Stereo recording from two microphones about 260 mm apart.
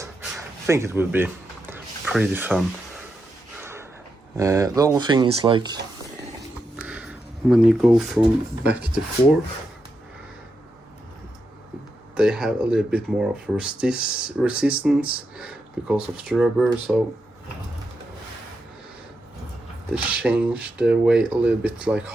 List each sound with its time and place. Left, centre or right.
0.7 s speech: centre
3.6 s a sound: centre
4.4 s speech: centre
6.8 s a sound: centre
12.1 s speech: centre
19.9 s speech: centre